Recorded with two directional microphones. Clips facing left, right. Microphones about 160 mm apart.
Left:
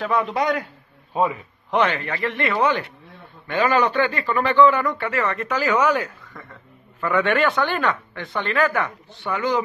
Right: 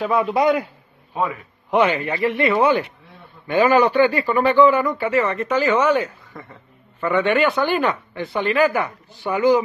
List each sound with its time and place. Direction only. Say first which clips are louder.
0.0 s speech: right 4 dB; 5° right (ahead or behind)
1.1 s a man's voice: left 2 dB; 25° left (ahead or behind)
1.7 s speech: right 3 dB; 10° right (ahead or behind)